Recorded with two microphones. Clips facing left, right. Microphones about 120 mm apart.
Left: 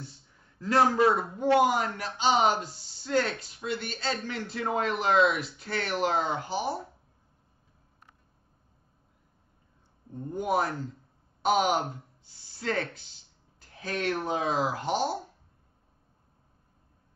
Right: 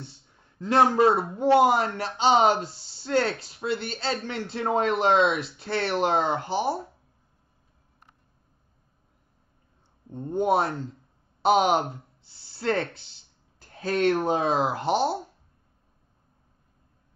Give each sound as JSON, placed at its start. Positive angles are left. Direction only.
{"t": 0.6, "sound": "a man's voice", "side_deg": -25}
{"t": 10.1, "sound": "a man's voice", "side_deg": -30}